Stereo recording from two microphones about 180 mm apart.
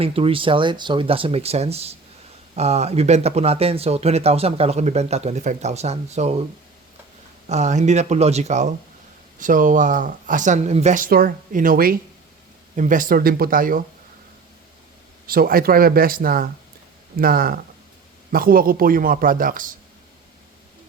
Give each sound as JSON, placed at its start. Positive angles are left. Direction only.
{"t": 0.0, "sound": "speech", "side_deg": -30}
{"t": 7.4, "sound": "speech", "side_deg": -40}
{"t": 15.3, "sound": "speech", "side_deg": -55}